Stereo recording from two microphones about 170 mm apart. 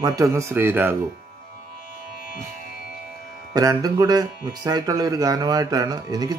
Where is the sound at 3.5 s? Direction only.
20° right (ahead or behind).